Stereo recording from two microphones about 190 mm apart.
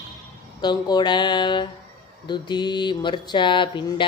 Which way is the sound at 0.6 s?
20° left (ahead or behind).